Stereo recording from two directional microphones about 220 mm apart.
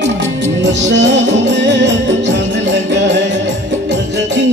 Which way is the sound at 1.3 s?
55° right (ahead or behind).